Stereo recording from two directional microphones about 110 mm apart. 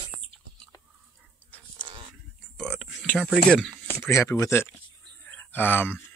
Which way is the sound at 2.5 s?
5° left (ahead or behind).